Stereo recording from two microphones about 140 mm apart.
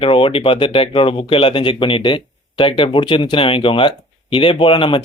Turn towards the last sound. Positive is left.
turn(degrees=40)  # may be behind; listen again after turning